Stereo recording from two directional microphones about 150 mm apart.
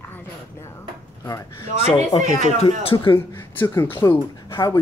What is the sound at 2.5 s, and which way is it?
Speech, 40° left (ahead or behind).